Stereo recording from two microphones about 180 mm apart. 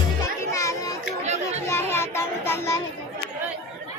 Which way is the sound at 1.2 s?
40° right (ahead or behind).